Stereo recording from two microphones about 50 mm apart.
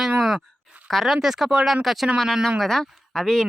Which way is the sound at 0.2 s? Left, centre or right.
Centre.